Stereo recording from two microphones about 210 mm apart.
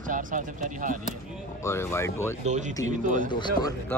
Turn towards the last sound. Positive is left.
turn(degrees=15)  # may be behind; listen again after turning